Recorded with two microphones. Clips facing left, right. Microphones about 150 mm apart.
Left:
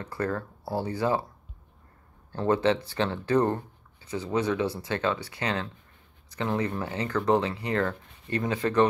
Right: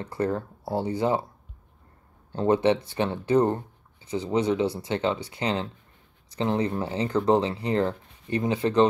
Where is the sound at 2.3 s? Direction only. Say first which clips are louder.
Right 3 dB; 20° right (ahead or behind).